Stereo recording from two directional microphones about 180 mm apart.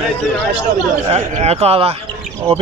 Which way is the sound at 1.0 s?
35° right (ahead or behind).